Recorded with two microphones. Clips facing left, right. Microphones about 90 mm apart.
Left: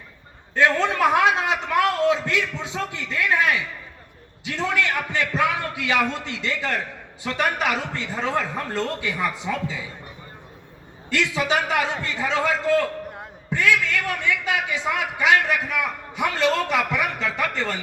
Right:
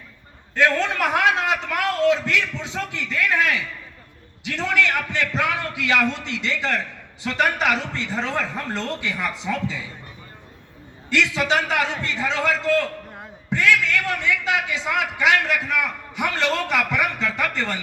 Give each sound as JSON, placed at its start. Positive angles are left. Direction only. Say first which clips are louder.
{"t": 0.7, "sound": "a man's voice", "louder": "left 2 dB", "side_deg": 10}
{"t": 11.5, "sound": "a man's voice", "louder": "right 1 dB", "side_deg": 15}